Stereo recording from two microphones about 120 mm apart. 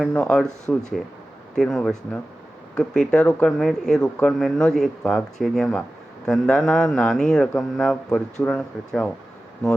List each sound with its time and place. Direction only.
0.0 s speech: 5° left (ahead or behind)